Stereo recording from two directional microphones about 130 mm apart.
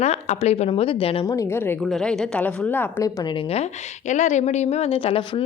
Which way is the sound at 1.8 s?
5° left (ahead or behind).